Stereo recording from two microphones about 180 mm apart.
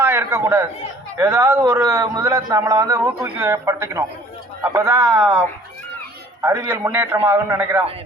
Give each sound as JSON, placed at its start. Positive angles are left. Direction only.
{"t": 0.0, "sound": "a man's voice", "side_deg": -15}
{"t": 6.4, "sound": "a man's voice", "side_deg": -15}